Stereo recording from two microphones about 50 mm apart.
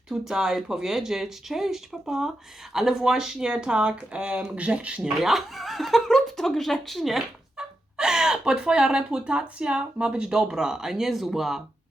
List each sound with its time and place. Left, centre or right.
0.1 s speech: centre
5.2 s speech: centre
7.5 s speech: centre